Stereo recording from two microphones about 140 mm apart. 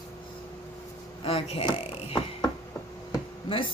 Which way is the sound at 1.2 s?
45° left (ahead or behind).